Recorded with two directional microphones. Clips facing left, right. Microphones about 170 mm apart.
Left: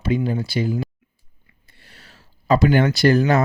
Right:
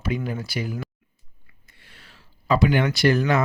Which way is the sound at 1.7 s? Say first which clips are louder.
Left 3 dB; 35° left (ahead or behind).